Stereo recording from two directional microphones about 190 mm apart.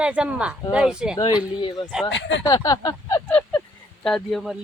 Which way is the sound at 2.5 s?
20° left (ahead or behind).